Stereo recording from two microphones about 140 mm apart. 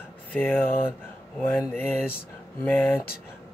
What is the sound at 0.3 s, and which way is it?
Mantra, 15° left (ahead or behind).